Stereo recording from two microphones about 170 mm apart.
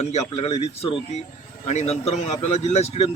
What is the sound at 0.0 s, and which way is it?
Speech, 40° left (ahead or behind).